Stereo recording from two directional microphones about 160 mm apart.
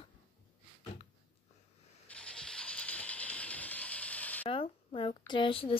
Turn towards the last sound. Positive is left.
turn(degrees=35)  # may be behind; listen again after turning